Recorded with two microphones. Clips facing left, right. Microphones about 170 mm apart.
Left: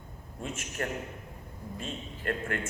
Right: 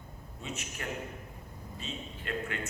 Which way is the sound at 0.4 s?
50° left (ahead or behind).